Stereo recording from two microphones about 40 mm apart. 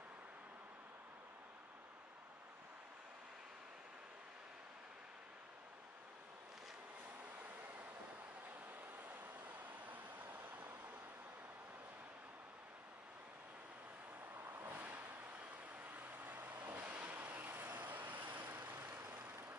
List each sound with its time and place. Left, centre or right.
9.8 s vehicle: right
14.4 s vehicle: right
15.7 s vehicle: right